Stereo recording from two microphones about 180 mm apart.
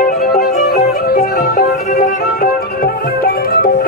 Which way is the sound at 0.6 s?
35° left (ahead or behind).